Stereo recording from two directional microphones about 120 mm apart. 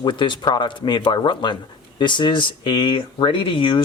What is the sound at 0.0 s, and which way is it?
Speech, 40° left (ahead or behind).